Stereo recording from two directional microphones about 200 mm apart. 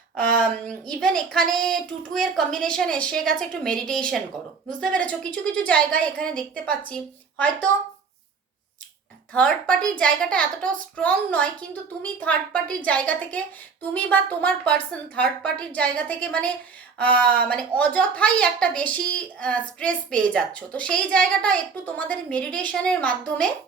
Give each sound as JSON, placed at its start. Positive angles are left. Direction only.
{"t": 0.2, "sound": "a sound", "side_deg": -45}
{"t": 0.9, "sound": "a woman's voice", "side_deg": 5}
{"t": 9.3, "sound": "a woman's voice", "side_deg": 5}